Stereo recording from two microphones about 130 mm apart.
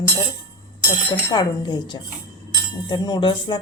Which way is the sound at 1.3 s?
35° left (ahead or behind).